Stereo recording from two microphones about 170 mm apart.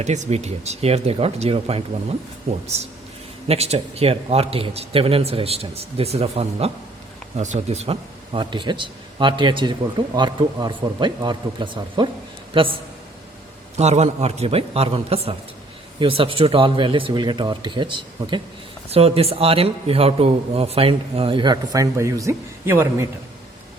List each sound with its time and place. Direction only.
0.0 s a man's voice: 45° right (ahead or behind)
13.7 s a man's voice: 40° right (ahead or behind); by 23.0 s 15° right (ahead or behind)